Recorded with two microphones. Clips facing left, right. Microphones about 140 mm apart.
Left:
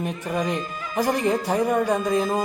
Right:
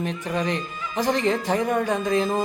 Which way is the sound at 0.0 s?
10° left (ahead or behind).